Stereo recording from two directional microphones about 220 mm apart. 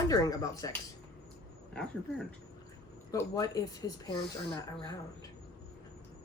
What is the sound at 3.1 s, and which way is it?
Speech, 15° left (ahead or behind).